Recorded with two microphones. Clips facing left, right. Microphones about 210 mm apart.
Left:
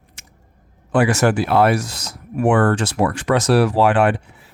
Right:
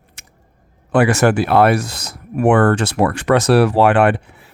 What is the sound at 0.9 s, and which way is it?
Speech, 65° right (ahead or behind).